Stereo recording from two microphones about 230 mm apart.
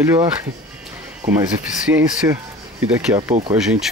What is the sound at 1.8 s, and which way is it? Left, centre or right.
Speech, centre.